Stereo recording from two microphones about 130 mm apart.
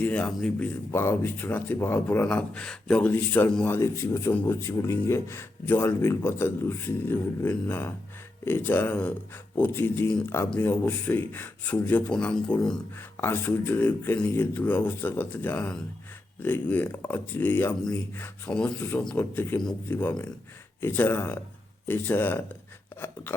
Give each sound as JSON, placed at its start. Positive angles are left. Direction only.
{"t": 0.0, "sound": "speech", "side_deg": 10}
{"t": 0.9, "sound": "speech", "side_deg": 20}
{"t": 13.1, "sound": "speech", "side_deg": 20}